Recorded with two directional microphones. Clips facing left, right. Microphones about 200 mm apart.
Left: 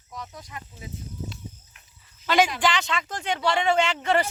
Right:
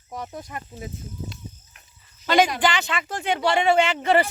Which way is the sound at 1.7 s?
40° right (ahead or behind).